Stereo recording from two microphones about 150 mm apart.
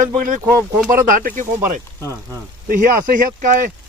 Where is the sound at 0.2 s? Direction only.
65° right (ahead or behind).